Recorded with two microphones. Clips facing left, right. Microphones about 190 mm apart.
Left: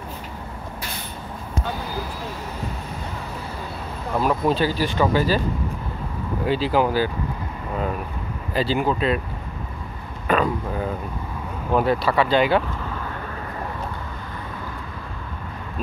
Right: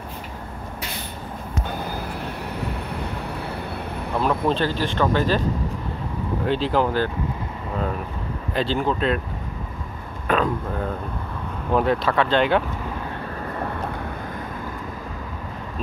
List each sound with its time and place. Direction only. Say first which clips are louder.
1.7 s vehicle: even; 60° right (ahead or behind)
4.2 s speech: left 1 dB; 5° left (ahead or behind)
6.4 s speech: left 1 dB; 5° left (ahead or behind)
8.5 s speech: left 1 dB; 5° left (ahead or behind)
10.2 s speech: left 1 dB; 5° left (ahead or behind)